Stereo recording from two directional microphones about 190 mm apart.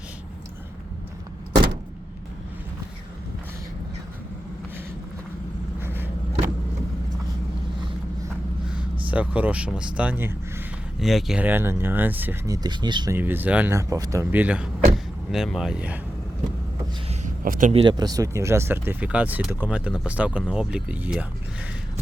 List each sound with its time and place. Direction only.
5.8 s vehicle: 10° right (ahead or behind)
9.0 s speech: 10° right (ahead or behind)
12.6 s speech: 25° right (ahead or behind)
13.1 s speech: 10° right (ahead or behind)
17.1 s speech: 45° right (ahead or behind); by 21.2 s 5° right (ahead or behind)